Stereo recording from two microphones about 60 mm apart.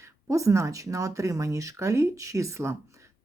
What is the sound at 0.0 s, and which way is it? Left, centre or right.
A woman's voice, right.